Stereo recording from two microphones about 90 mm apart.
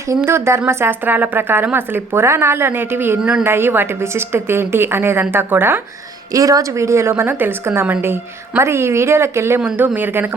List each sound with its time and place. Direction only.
0.3 s a woman's voice: 30° right (ahead or behind)
6.3 s a woman's voice: 40° right (ahead or behind); by 10.2 s 20° right (ahead or behind)